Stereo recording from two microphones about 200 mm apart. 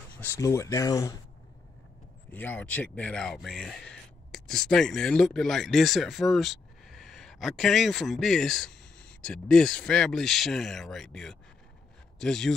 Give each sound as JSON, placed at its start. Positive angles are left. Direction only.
{"t": 0.2, "sound": "speech", "side_deg": 15}
{"t": 2.3, "sound": "speech", "side_deg": 10}